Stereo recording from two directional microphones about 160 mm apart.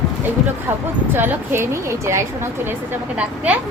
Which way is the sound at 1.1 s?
15° right (ahead or behind).